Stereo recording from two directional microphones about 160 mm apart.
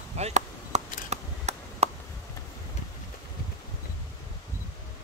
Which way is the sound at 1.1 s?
45° right (ahead or behind).